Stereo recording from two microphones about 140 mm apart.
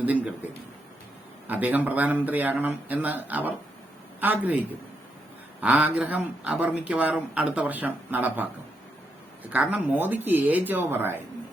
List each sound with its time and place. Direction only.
0.0 s speech: 10° right (ahead or behind)
1.5 s speech: 10° right (ahead or behind)
5.5 s speech: 10° right (ahead or behind)
9.5 s speech: 10° right (ahead or behind)